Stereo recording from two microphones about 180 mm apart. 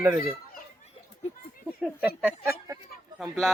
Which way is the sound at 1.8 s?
5° right (ahead or behind).